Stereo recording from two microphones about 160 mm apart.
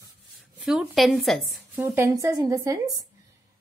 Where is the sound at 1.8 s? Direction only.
15° right (ahead or behind).